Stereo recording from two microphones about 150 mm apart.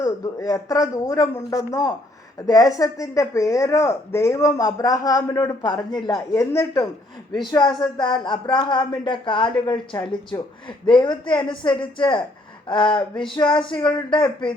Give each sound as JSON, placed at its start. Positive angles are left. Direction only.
{"t": 0.0, "sound": "speech", "side_deg": 20}
{"t": 7.4, "sound": "speech", "side_deg": 30}